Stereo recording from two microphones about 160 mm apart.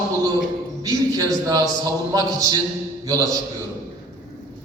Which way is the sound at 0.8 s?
25° right (ahead or behind).